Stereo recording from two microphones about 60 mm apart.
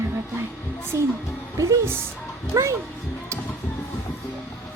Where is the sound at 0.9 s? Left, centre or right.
Right.